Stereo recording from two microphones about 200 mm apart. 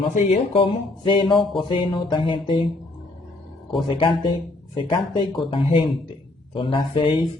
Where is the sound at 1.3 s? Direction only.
Centre (ahead or behind).